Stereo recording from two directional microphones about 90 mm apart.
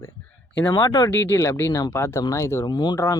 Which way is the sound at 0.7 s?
50° left (ahead or behind).